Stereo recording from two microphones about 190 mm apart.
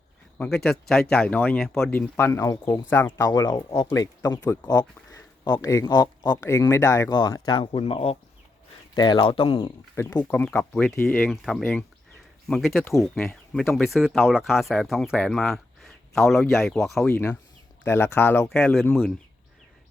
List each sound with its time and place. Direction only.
0.3 s speech: 5° left (ahead or behind)